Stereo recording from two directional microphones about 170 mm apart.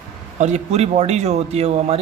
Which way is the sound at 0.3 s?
40° right (ahead or behind).